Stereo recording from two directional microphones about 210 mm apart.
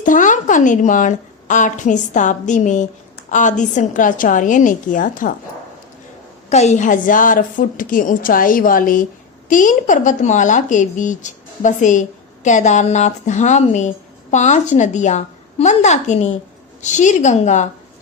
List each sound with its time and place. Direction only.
0.0 s speech: 40° left (ahead or behind)
6.5 s speech: 30° left (ahead or behind)